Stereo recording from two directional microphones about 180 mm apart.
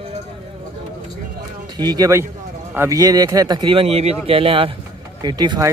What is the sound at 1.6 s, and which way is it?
Speech, 25° right (ahead or behind).